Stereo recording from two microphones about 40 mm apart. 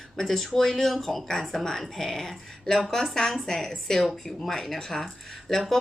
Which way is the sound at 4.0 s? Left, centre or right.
Centre.